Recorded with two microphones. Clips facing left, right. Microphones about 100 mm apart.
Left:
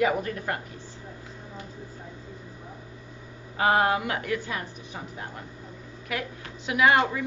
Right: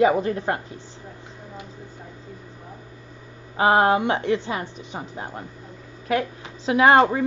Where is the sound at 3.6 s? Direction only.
25° right (ahead or behind).